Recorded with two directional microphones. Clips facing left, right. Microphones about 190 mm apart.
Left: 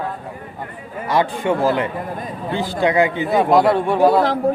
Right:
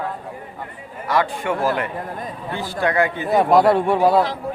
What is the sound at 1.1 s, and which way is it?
A man's voice, 20° left (ahead or behind).